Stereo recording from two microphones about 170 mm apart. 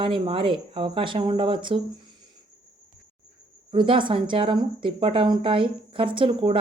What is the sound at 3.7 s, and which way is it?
Speech, 30° right (ahead or behind).